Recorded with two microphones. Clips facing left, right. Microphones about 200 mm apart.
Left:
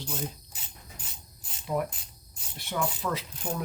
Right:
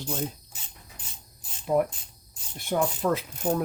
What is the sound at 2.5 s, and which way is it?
Speech, 50° right (ahead or behind).